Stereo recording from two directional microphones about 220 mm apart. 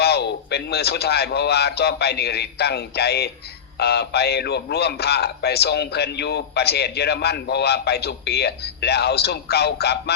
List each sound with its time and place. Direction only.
0.0 s a man's voice: 50° left (ahead or behind)